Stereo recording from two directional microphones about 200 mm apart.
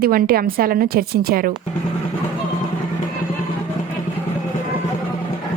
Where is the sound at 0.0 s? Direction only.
50° right (ahead or behind).